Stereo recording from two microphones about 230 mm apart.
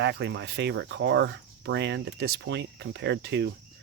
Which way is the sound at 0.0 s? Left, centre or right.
Right.